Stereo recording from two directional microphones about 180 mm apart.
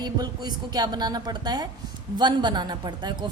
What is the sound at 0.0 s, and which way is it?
A woman's voice, 25° right (ahead or behind).